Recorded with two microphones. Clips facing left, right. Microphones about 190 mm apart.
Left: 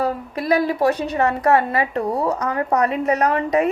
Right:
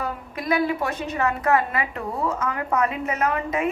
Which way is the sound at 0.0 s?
35° left (ahead or behind).